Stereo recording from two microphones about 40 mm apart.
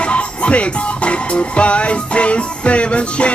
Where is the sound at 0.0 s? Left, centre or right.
Left.